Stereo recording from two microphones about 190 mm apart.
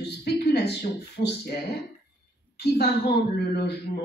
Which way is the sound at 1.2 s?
60° left (ahead or behind).